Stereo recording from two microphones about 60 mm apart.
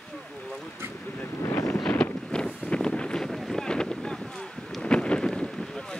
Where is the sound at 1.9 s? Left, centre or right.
Centre.